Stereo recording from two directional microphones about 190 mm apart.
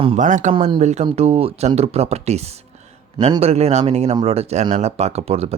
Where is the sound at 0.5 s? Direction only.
30° right (ahead or behind).